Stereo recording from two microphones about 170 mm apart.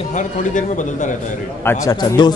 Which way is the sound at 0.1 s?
45° left (ahead or behind).